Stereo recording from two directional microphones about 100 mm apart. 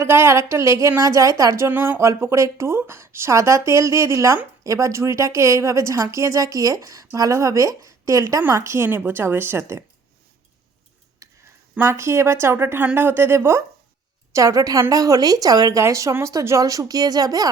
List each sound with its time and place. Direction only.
0.0 s a woman's voice: 25° right (ahead or behind)
11.2 s a sound: 35° right (ahead or behind)
11.8 s a woman's voice: 25° right (ahead or behind)